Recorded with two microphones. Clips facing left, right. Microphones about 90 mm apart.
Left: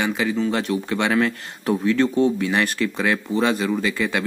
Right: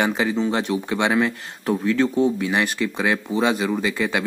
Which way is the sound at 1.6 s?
Centre (ahead or behind).